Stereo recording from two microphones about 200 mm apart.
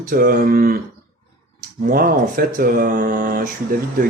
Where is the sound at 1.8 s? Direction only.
45° right (ahead or behind).